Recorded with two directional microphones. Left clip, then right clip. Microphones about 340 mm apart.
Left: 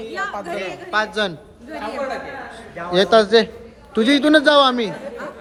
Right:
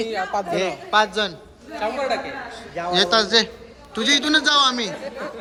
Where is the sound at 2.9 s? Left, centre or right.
Centre.